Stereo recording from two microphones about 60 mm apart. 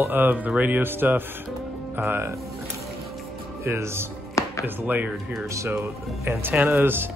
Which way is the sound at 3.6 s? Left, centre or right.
Right.